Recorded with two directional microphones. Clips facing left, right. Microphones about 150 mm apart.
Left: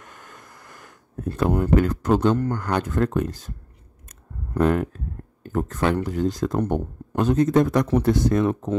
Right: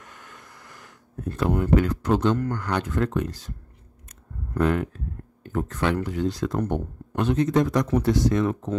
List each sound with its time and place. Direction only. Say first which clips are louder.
0.0 s a sound: left 1 dB; 45° left (ahead or behind)
1.4 s speech: left 2 dB; 45° left (ahead or behind)
4.6 s speech: left 3 dB; 45° left (ahead or behind)